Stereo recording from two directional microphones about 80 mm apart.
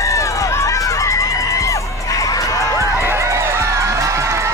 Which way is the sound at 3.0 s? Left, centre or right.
Right.